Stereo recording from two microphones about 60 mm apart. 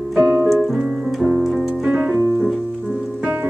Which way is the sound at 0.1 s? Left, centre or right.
Centre.